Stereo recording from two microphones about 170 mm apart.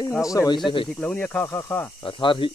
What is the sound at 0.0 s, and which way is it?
Speech, 20° left (ahead or behind).